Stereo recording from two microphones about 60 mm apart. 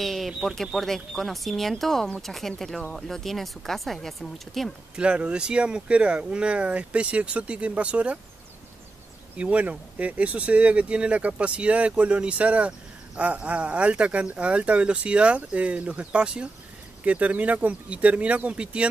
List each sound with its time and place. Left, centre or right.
0.0 s bird: centre
0.3 s speech: centre
0.7 s speech: centre
4.9 s speech: centre
9.4 s speech: right